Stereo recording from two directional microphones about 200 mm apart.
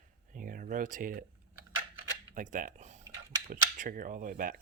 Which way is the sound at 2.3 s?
40° right (ahead or behind).